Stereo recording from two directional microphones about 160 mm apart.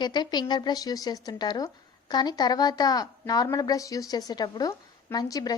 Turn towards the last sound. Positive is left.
turn(degrees=25)  # may be behind; listen again after turning